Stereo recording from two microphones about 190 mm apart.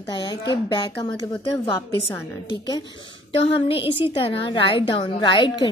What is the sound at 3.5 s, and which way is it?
A woman's voice, 25° left (ahead or behind).